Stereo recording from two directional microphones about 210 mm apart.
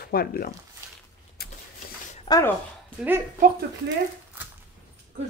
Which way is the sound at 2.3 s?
20° left (ahead or behind).